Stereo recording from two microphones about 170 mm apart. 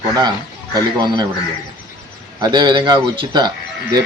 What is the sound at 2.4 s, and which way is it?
Speech, 25° right (ahead or behind).